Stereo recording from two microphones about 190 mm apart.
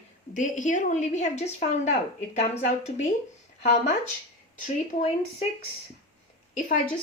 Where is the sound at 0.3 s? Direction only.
40° left (ahead or behind).